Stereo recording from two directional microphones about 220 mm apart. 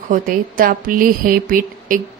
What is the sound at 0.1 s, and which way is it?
A woman's voice, 40° right (ahead or behind).